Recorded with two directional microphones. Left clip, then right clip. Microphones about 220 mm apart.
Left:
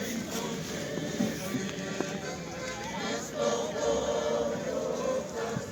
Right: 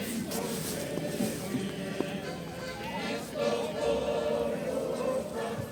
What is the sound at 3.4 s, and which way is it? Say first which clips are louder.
Choir: even; 10° right (ahead or behind).